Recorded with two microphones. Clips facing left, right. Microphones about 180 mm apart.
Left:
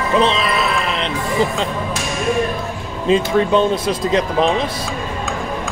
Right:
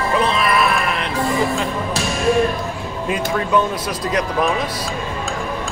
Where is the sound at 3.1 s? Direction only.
25° left (ahead or behind).